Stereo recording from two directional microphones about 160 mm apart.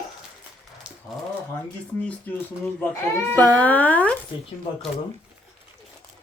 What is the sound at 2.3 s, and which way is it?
A woman's voice, 10° left (ahead or behind).